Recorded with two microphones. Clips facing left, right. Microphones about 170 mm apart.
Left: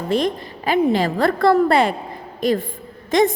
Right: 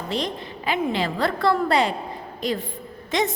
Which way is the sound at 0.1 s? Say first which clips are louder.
Left 8 dB; 45° left (ahead or behind).